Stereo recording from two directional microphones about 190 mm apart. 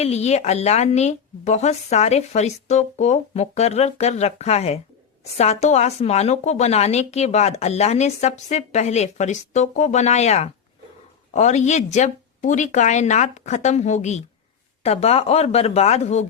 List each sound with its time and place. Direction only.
0.0 s speech: 35° left (ahead or behind)